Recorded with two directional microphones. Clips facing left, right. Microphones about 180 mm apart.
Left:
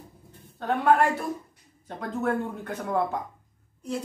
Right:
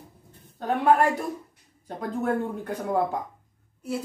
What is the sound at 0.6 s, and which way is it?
Speech, 15° right (ahead or behind).